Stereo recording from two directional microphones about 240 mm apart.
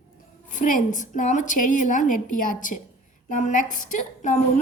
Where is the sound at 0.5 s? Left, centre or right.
Left.